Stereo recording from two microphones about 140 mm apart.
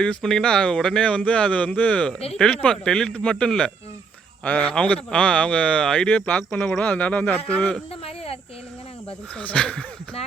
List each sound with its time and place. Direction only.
0.0 s speech: 5° left (ahead or behind)
8.0 s a sound: 45° left (ahead or behind)
9.3 s speech: 10° left (ahead or behind)